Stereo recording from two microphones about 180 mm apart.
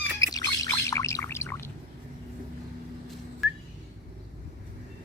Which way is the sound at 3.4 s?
Centre (ahead or behind).